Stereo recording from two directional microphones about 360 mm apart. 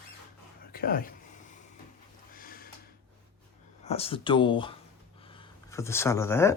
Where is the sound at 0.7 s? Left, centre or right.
Left.